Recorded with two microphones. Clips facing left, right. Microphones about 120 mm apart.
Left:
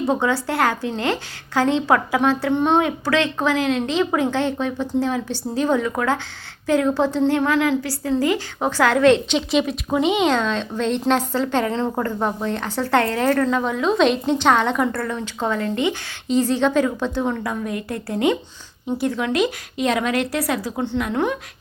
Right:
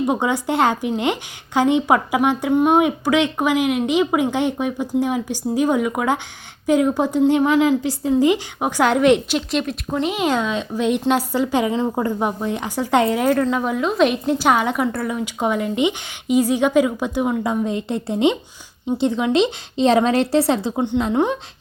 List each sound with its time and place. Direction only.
0.0 s a woman's voice: 15° right (ahead or behind)
9.5 s a woman's voice: centre (ahead or behind); by 21.3 s 20° right (ahead or behind)